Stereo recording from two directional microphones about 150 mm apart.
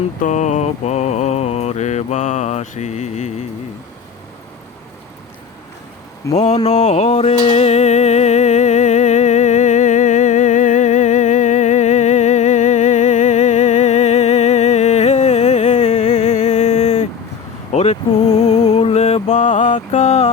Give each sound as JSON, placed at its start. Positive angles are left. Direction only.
{"t": 0.2, "sound": "mantra", "side_deg": 55}
{"t": 6.3, "sound": "mantra", "side_deg": 50}
{"t": 6.7, "sound": "music", "side_deg": 50}
{"t": 17.7, "sound": "a sound", "side_deg": 45}